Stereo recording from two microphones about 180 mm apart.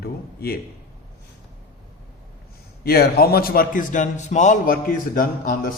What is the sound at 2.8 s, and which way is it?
A man's voice, 60° left (ahead or behind).